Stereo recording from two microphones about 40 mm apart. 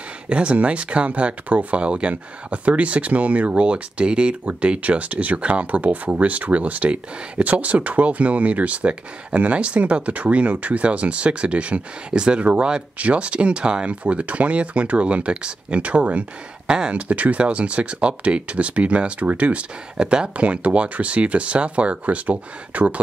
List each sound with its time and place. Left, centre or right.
0.3 s speech: right